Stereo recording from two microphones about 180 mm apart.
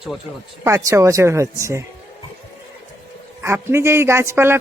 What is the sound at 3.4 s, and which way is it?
Speech, 15° right (ahead or behind).